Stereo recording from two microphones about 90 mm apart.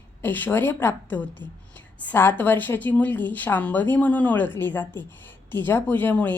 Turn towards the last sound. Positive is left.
turn(degrees=20)  # may be behind; listen again after turning